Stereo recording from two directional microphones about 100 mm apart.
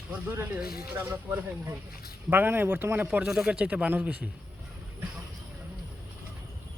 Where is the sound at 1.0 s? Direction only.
15° right (ahead or behind).